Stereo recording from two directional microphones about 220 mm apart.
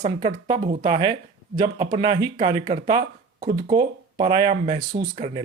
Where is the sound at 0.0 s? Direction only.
25° right (ahead or behind).